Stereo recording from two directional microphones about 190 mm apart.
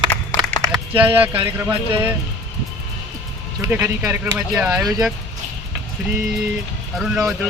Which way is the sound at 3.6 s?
10° right (ahead or behind).